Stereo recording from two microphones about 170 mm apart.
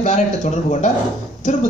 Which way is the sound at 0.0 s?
40° left (ahead or behind).